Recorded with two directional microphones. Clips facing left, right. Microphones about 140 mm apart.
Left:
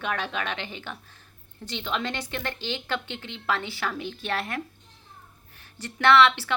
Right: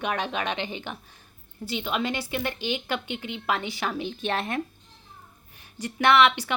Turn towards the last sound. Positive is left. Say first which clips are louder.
# left 1 dB
turn(degrees=-15)  # may be behind; listen again after turning